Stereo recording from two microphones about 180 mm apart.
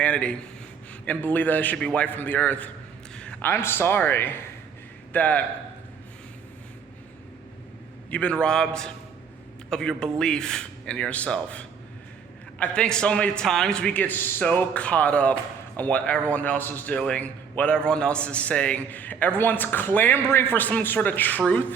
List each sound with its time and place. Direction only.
0.0 s a man's voice: 5° left (ahead or behind)
8.1 s a man's voice: 5° left (ahead or behind)